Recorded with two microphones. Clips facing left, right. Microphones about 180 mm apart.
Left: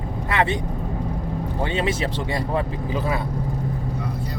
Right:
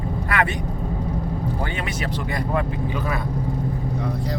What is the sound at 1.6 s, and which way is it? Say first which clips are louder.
Speech: left 4 dB; 25° left (ahead or behind).